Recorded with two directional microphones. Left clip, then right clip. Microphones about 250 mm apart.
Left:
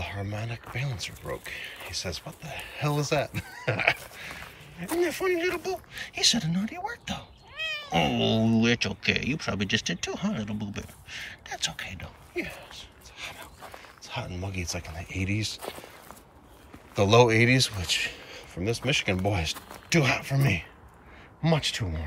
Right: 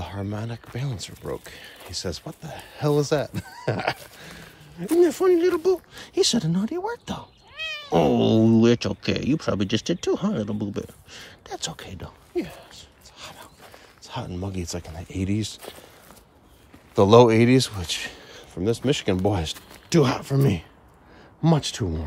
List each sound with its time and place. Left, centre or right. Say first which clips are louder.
0.0 s speech: right 2 dB; centre
16.9 s a man's voice: right 5 dB; centre